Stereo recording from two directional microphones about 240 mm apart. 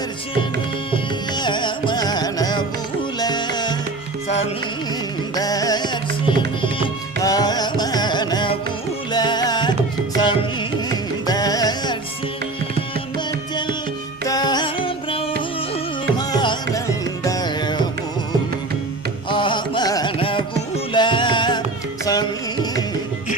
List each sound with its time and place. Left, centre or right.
0.9 s music: centre
5.3 s music: centre
7.2 s music: centre
10.2 s carnatic music: centre
13.1 s music: centre
19.3 s music: centre
22.0 s carnatic music: centre